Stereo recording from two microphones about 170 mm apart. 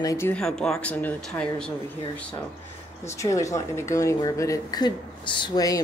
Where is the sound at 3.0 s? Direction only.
15° left (ahead or behind).